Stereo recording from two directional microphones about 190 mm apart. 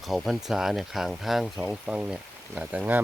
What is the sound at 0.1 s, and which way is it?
Speech, centre (ahead or behind).